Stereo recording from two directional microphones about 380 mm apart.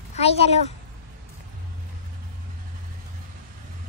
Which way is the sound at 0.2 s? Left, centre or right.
Centre.